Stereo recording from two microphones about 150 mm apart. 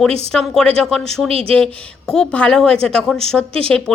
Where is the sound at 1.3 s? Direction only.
40° right (ahead or behind).